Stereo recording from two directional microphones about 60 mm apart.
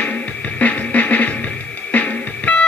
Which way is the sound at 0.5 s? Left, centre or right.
Left.